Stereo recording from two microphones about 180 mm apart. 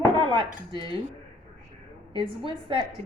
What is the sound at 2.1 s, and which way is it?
Speech, 30° right (ahead or behind).